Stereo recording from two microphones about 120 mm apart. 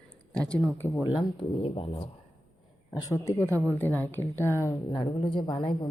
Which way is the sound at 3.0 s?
25° left (ahead or behind).